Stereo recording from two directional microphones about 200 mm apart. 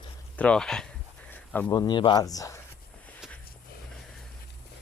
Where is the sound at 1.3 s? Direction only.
10° left (ahead or behind).